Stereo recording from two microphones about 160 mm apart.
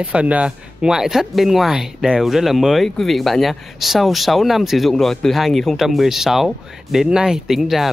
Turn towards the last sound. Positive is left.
turn(degrees=0)  # may be behind; listen again after turning